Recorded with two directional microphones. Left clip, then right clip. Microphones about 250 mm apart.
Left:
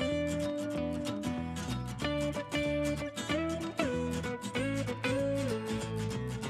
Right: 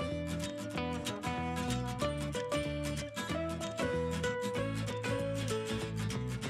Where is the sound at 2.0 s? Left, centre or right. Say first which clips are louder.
Left 5 dB; centre.